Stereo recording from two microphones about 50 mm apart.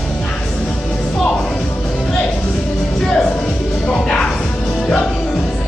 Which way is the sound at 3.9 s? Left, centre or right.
Centre.